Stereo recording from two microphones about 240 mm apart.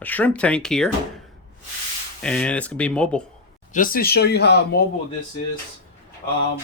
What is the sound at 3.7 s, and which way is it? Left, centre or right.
Speech, left.